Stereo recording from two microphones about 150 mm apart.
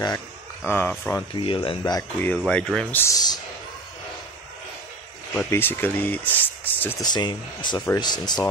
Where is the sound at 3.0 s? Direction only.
20° left (ahead or behind).